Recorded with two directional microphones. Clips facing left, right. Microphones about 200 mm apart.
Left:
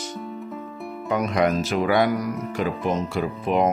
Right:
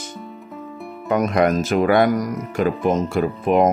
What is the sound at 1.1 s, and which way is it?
Speech, 50° right (ahead or behind).